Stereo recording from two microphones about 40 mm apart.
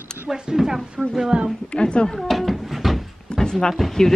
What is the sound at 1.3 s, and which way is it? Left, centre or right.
Speech, right.